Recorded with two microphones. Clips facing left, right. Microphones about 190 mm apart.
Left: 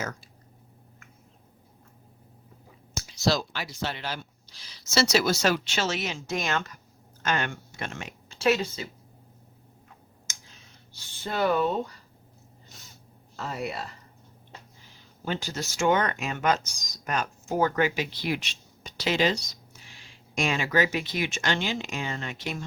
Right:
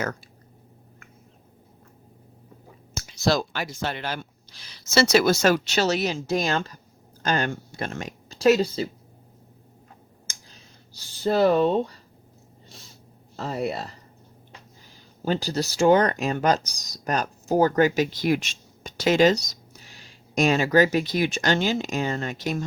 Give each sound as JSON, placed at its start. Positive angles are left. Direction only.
{"t": 2.9, "sound": "speech", "side_deg": -60}
{"t": 10.2, "sound": "a sound", "side_deg": -35}
{"t": 13.3, "sound": "speech", "side_deg": -35}
{"t": 15.2, "sound": "speech", "side_deg": -35}